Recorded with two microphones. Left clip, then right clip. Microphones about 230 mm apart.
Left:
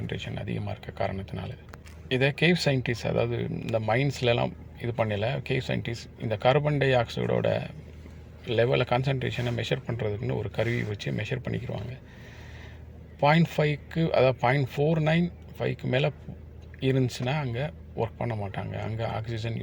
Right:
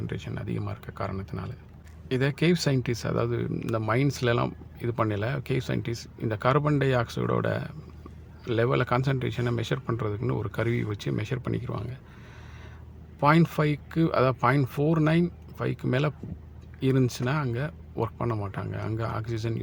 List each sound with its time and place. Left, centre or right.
0.1 s speech: centre
13.1 s speech: centre